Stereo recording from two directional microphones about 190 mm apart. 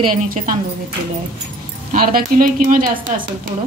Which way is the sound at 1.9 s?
50° right (ahead or behind).